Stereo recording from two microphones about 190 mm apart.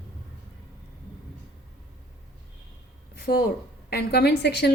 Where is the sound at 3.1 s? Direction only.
55° left (ahead or behind).